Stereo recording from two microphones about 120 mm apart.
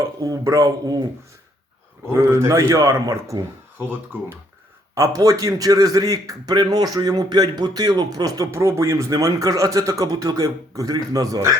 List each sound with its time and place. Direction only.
0.2 s speech: 30° right (ahead or behind)
2.0 s a man's voice: 25° right (ahead or behind)